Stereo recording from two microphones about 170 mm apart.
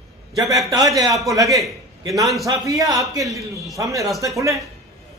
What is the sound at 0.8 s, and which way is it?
A man's voice, centre (ahead or behind).